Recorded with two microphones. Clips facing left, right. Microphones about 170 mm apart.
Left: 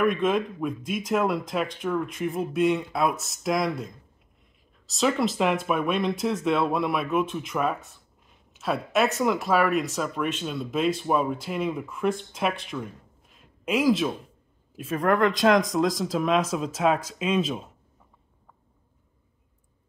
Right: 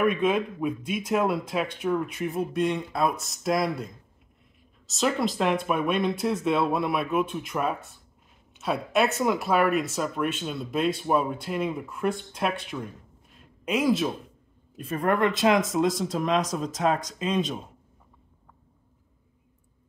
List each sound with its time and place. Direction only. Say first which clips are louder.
0.0 s speech: even; 5° right (ahead or behind)
13.4 s a sound: left 1 dB; centre (ahead or behind)
14.8 s speech: left 2 dB; centre (ahead or behind)